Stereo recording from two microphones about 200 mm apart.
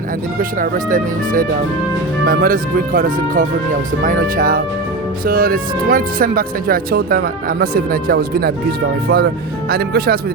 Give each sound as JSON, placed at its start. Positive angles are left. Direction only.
{"t": 0.3, "sound": "speech", "side_deg": -45}